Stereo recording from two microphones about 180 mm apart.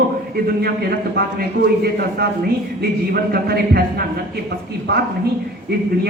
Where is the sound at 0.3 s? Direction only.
60° right (ahead or behind).